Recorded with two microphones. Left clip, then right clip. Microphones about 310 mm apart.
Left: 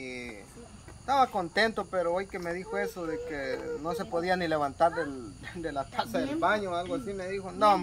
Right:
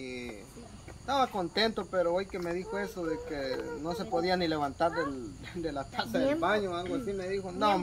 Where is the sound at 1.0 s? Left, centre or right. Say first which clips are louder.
Left 4 dB; centre.